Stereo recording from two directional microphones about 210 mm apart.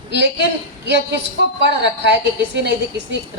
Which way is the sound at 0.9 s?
55° right (ahead or behind).